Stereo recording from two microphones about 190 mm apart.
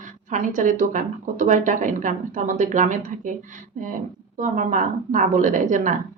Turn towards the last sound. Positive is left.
turn(degrees=-40)  # may be behind; listen again after turning